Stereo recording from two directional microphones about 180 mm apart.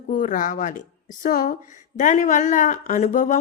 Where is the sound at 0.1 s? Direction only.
45° left (ahead or behind).